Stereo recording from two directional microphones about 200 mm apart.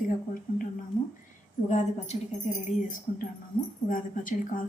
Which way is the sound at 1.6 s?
35° left (ahead or behind).